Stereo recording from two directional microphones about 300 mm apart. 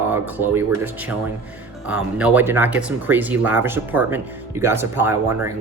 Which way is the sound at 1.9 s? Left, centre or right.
Centre.